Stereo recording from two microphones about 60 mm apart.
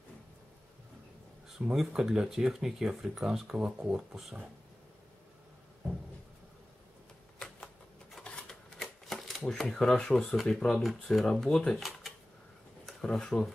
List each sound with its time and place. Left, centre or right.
1.6 s speech: centre
7.3 s a sound: centre
8.2 s typewriter: centre
8.8 s typewriter: centre
9.4 s speech: centre
13.0 s speech: centre